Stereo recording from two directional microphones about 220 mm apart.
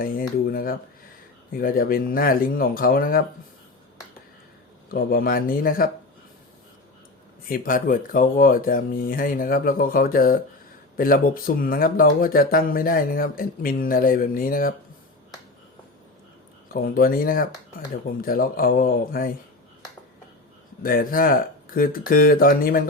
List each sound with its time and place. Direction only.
0.0 s speech: 40° left (ahead or behind)
4.9 s speech: 40° left (ahead or behind)
7.4 s speech: 40° left (ahead or behind)
16.6 s speech: 40° left (ahead or behind)
20.8 s speech: 40° left (ahead or behind)